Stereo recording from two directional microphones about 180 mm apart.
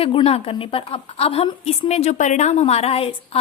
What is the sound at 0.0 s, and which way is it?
Speech, 30° left (ahead or behind).